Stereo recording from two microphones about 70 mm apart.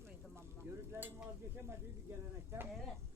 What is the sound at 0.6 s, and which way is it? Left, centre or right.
Stir, right.